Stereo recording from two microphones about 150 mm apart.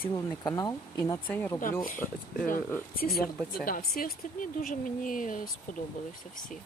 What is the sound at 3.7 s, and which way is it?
Speech, 70° left (ahead or behind).